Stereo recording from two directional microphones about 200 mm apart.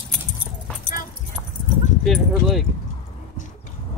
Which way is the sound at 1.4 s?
10° right (ahead or behind).